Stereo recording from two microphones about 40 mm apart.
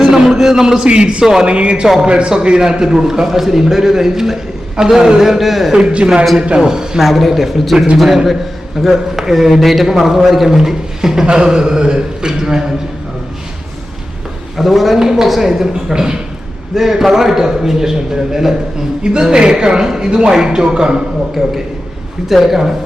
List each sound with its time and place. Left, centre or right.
0.0 s a sound: centre
0.9 s speech: right
1.2 s a man's voice: centre
1.5 s speech: right
2.6 s a man's voice: centre
6.4 s a man's voice: right
7.0 s a man's voice: centre
14.5 s a man's voice: centre
21.4 s a man's voice: centre